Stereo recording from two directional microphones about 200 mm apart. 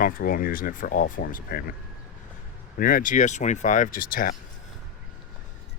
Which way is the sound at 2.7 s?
45° left (ahead or behind).